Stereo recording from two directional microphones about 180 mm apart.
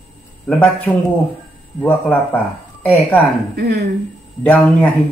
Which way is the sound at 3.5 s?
65° right (ahead or behind).